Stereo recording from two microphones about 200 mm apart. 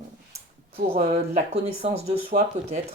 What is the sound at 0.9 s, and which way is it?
Speech, 30° right (ahead or behind).